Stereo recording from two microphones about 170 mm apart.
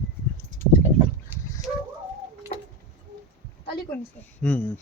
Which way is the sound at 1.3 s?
10° right (ahead or behind).